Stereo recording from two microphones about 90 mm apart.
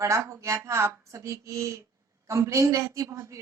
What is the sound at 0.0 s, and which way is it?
A woman's voice, 35° right (ahead or behind).